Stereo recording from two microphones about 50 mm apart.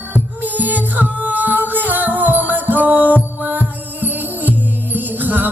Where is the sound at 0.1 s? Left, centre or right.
Right.